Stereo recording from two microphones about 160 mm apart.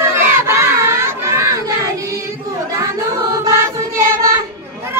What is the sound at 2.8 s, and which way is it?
Music, 20° right (ahead or behind).